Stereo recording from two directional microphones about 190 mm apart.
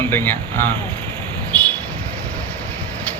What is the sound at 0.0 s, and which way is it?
Speech, 10° left (ahead or behind).